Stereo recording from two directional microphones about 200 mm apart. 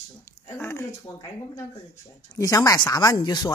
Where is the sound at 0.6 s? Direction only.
10° left (ahead or behind).